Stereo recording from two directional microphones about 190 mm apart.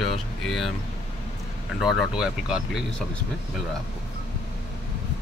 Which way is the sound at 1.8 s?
Centre (ahead or behind).